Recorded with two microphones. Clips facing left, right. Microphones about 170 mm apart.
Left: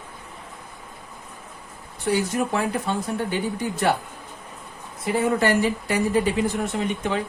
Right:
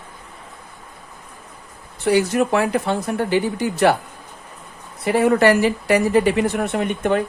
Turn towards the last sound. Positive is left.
turn(degrees=-60)  # may be behind; listen again after turning